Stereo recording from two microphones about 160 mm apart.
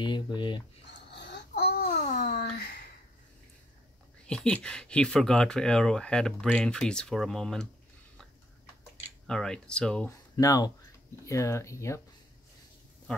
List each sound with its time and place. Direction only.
0.0 s speech: 30° left (ahead or behind)
1.1 s babbling: 90° left; by 2.0 s 75° left (ahead or behind)
2.0 s a sound: 55° left (ahead or behind); by 2.8 s 80° left
4.3 s speech: 5° left (ahead or behind)
9.3 s speech: 5° left (ahead or behind)
10.3 s speech: 25° left (ahead or behind)